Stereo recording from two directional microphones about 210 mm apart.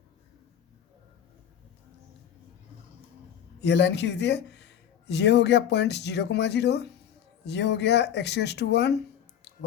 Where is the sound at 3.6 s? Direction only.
55° left (ahead or behind).